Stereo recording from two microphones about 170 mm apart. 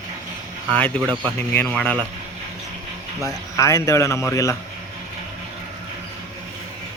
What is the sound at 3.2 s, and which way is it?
A man's voice, 20° left (ahead or behind).